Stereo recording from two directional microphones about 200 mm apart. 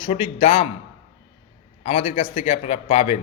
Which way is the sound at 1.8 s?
30° left (ahead or behind).